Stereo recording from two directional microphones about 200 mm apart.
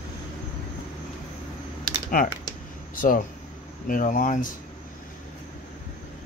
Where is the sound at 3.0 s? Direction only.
45° left (ahead or behind).